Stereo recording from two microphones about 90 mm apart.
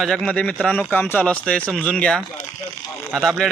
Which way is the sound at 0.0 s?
5° left (ahead or behind).